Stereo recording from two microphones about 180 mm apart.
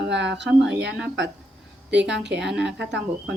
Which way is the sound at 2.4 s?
5° right (ahead or behind).